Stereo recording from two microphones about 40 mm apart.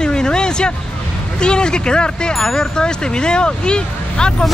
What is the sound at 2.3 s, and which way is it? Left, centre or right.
Speech, centre.